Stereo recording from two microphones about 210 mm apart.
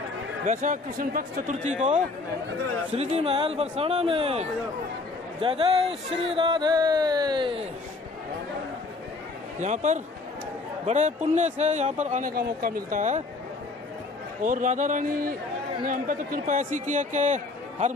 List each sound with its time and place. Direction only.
0.5 s speech: 35° right (ahead or behind)
9.6 s speech: 35° right (ahead or behind)
14.4 s speech: 35° right (ahead or behind)